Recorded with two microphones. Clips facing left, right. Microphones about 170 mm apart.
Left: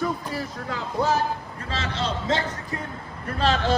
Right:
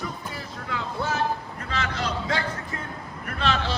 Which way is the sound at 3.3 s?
35° left (ahead or behind).